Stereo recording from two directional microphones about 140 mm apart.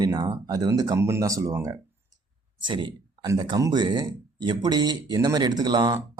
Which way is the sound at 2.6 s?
35° right (ahead or behind).